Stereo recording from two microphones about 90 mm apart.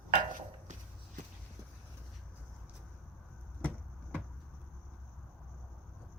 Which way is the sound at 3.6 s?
15° left (ahead or behind).